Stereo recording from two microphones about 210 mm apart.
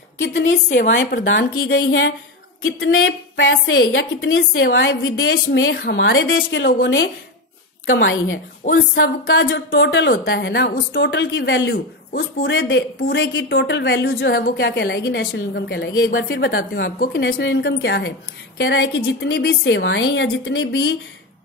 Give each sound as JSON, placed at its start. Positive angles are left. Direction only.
{"t": 0.2, "sound": "a woman's voice", "side_deg": 60}
{"t": 1.5, "sound": "a woman's voice", "side_deg": 75}
{"t": 8.6, "sound": "speech", "side_deg": 35}
{"t": 9.4, "sound": "a woman's voice", "side_deg": 60}
{"t": 16.3, "sound": "a woman's voice", "side_deg": 45}